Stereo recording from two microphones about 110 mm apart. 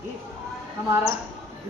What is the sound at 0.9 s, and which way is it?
Speech, 30° right (ahead or behind).